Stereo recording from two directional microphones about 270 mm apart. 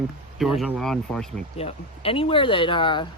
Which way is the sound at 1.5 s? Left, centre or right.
Left.